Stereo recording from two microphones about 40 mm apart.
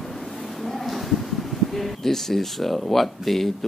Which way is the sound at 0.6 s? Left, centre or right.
Centre.